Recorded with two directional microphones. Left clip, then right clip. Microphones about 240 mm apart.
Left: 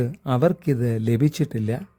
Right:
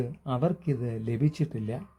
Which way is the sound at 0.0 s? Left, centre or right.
Left.